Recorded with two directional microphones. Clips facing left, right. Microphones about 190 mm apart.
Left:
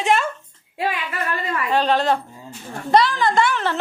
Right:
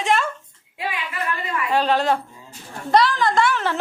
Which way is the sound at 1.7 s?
10° right (ahead or behind).